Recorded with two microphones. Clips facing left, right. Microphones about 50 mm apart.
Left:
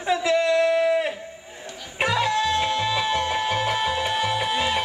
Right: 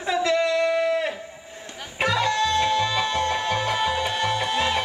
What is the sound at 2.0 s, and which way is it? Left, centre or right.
Music, centre.